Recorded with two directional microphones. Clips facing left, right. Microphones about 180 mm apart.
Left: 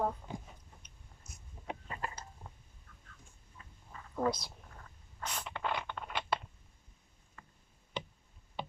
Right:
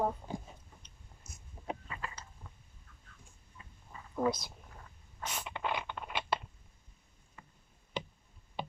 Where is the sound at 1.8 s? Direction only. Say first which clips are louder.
Left 3 dB; 45° left (ahead or behind).